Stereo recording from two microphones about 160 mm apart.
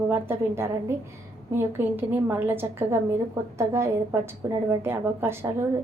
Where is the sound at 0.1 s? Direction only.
15° right (ahead or behind).